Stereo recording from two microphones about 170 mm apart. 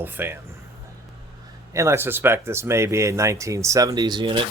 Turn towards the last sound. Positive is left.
turn(degrees=-30)  # may be behind; listen again after turning